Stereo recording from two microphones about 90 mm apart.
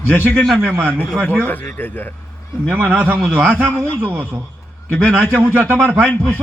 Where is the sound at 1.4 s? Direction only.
20° left (ahead or behind).